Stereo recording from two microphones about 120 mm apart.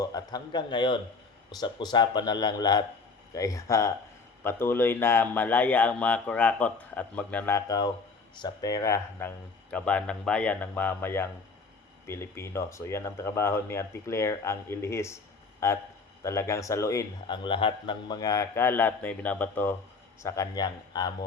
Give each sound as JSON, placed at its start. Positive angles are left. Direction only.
{"t": 0.0, "sound": "speech", "side_deg": 30}
{"t": 7.5, "sound": "speech", "side_deg": 30}
{"t": 17.2, "sound": "speech", "side_deg": 40}
{"t": 20.2, "sound": "speech", "side_deg": 25}